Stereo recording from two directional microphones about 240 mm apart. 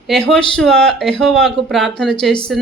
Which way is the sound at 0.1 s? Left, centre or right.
Centre.